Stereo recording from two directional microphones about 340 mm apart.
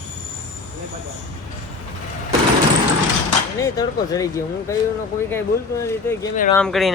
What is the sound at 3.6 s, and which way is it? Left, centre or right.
Speech, centre.